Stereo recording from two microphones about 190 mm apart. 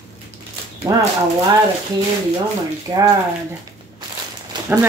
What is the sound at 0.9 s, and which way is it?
Speech, 15° right (ahead or behind).